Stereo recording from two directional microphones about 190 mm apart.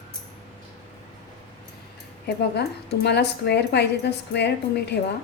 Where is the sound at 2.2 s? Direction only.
60° left (ahead or behind).